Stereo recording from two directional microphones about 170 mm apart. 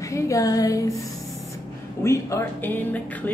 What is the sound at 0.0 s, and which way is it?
Female singing, 20° left (ahead or behind).